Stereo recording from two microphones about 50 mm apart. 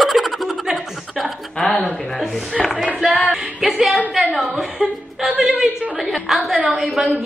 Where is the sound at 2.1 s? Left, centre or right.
Centre.